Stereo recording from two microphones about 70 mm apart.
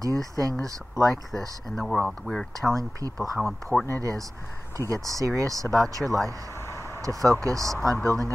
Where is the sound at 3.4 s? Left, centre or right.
Centre.